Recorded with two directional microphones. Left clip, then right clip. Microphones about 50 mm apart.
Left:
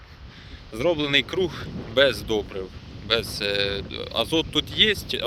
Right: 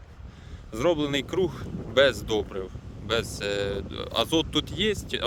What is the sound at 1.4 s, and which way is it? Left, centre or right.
Speech, right.